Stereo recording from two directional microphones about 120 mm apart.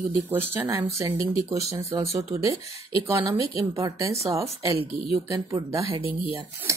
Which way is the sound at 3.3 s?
25° right (ahead or behind).